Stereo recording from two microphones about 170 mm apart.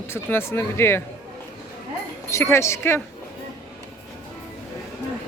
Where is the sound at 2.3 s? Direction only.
15° left (ahead or behind).